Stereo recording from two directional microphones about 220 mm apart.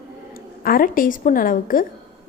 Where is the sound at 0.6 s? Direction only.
40° left (ahead or behind).